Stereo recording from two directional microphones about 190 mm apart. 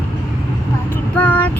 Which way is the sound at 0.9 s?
10° left (ahead or behind).